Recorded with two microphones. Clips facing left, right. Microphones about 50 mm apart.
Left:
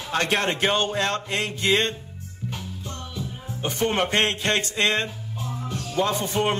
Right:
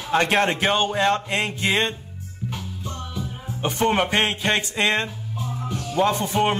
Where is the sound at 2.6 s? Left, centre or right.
Right.